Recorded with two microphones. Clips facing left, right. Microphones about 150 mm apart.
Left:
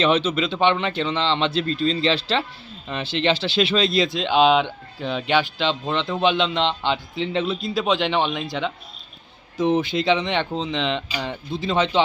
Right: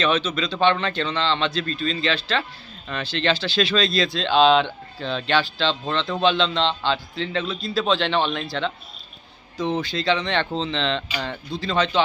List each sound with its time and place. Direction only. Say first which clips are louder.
0.0 s speech: left 3 dB; 30° left (ahead or behind)